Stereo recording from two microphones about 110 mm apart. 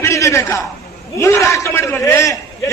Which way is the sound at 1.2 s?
25° left (ahead or behind).